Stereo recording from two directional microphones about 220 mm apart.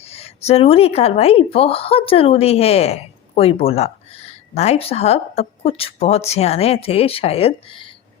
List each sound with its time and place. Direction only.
0.0 s speech: 25° left (ahead or behind)